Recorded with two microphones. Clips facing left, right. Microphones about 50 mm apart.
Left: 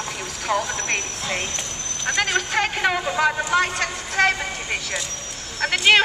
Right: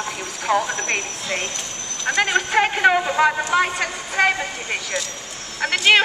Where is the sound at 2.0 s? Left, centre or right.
Centre.